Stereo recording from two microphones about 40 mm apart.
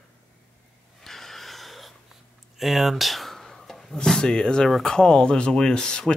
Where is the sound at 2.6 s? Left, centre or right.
Centre.